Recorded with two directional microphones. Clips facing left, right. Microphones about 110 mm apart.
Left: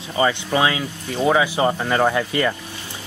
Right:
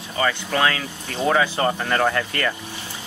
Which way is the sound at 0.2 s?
15° left (ahead or behind).